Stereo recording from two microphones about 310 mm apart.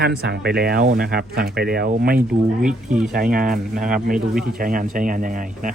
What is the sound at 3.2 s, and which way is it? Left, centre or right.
Speech, right.